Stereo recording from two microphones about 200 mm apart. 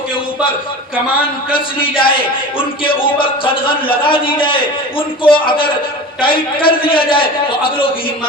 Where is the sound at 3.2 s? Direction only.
25° left (ahead or behind).